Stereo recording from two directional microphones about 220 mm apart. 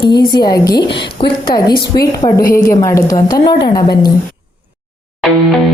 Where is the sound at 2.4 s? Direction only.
40° left (ahead or behind).